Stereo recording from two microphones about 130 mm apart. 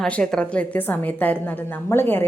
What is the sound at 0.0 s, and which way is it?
A woman's voice, 5° left (ahead or behind).